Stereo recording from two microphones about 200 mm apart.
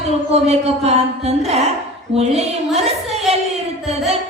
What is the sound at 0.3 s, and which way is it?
Music, 35° right (ahead or behind).